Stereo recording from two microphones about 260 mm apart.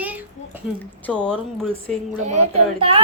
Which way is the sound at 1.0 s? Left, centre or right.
Centre.